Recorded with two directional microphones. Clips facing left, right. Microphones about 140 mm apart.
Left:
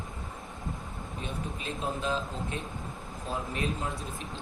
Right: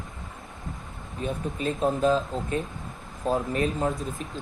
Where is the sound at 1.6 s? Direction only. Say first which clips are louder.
Right 11 dB; 45° right (ahead or behind).